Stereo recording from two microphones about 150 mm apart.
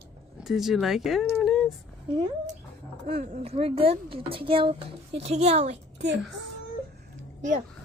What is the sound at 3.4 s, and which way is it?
Speech, 40° right (ahead or behind).